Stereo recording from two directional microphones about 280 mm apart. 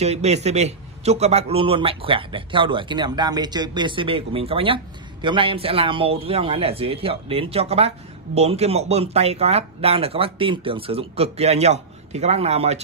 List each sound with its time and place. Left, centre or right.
0.0 s a man's voice: right